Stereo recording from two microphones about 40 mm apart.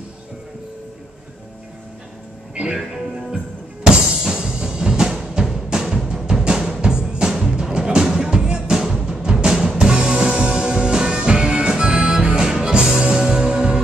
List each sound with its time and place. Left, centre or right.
2.5 s speech: centre
2.9 s music: centre
3.8 s drum: centre
5.3 s music: centre